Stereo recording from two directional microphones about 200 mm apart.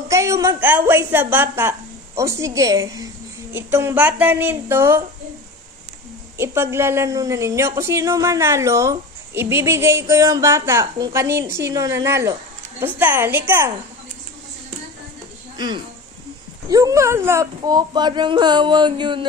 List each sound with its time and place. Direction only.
0.1 s a woman's voice: 15° right (ahead or behind)
6.3 s a woman's voice: 10° right (ahead or behind)
15.5 s speech: 20° right (ahead or behind)